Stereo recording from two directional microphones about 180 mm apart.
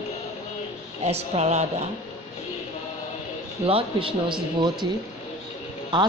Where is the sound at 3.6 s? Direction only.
30° right (ahead or behind).